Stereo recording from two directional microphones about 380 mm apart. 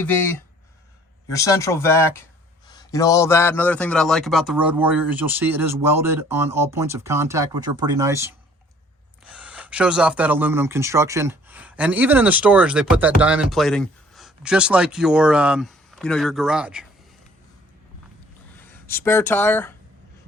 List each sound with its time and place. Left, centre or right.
0.0 s speech: centre
9.3 s speech: centre
18.6 s speech: centre